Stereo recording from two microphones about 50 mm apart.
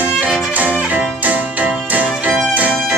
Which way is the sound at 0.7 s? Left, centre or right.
Right.